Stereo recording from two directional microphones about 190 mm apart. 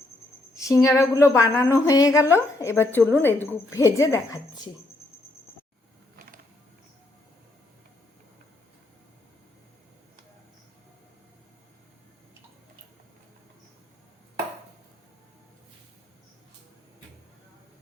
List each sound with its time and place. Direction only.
0.5 s a woman's voice: 15° left (ahead or behind)